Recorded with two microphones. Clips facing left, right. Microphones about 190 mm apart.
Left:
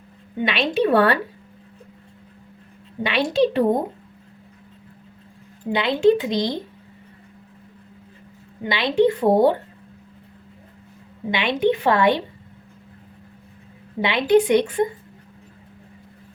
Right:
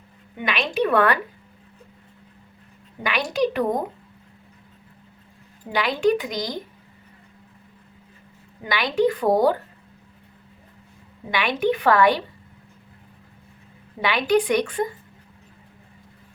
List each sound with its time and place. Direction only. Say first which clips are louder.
0.3 s a woman's voice: left 3 dB; 30° left (ahead or behind)
3.0 s a woman's voice: left 4 dB; 30° left (ahead or behind)
5.7 s a woman's voice: left 4 dB; 25° left (ahead or behind)
8.6 s a woman's voice: left 3 dB; 25° left (ahead or behind)
11.3 s a woman's voice: left 2 dB; 25° left (ahead or behind)
14.0 s a woman's voice: left 3 dB; 25° left (ahead or behind)